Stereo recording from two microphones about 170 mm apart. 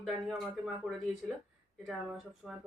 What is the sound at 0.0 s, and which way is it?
Speech, centre (ahead or behind).